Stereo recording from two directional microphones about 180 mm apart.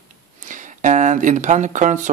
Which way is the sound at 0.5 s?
45° right (ahead or behind).